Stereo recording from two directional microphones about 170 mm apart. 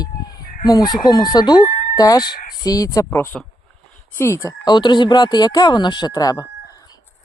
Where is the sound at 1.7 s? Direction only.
50° left (ahead or behind).